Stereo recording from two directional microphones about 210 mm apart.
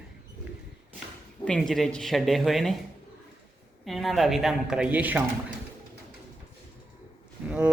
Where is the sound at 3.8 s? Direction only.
Centre (ahead or behind).